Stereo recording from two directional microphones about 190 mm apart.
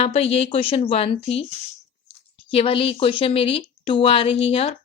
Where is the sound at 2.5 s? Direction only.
30° left (ahead or behind).